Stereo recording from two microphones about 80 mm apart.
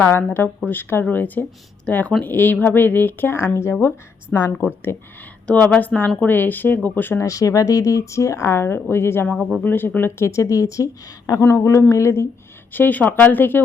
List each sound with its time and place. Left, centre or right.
0.0 s speech: left
5.5 s speech: centre
7.2 s speech: left
9.2 s speech: centre
9.6 s speech: left
12.7 s speech: left